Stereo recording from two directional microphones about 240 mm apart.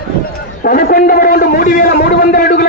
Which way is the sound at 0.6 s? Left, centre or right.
Left.